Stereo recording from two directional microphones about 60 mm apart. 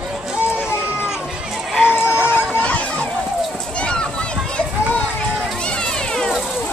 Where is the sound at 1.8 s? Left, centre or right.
Left.